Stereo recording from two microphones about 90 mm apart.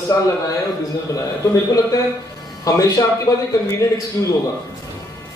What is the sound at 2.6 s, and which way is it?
A man's voice, 40° left (ahead or behind).